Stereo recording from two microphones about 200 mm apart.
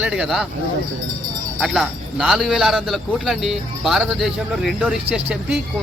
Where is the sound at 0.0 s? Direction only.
5° right (ahead or behind).